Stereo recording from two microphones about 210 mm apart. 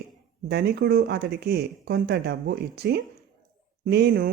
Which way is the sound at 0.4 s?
50° right (ahead or behind).